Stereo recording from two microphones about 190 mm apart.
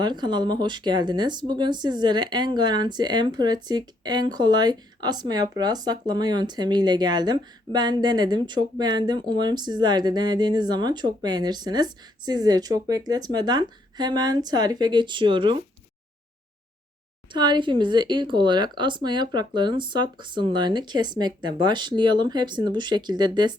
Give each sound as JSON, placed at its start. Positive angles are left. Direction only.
{"t": 0.0, "sound": "speech", "side_deg": -25}
{"t": 17.3, "sound": "speech", "side_deg": -25}